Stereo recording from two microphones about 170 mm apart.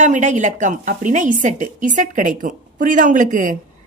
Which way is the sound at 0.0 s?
45° right (ahead or behind).